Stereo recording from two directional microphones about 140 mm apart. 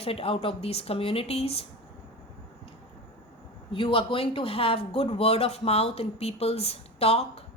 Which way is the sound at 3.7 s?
40° left (ahead or behind).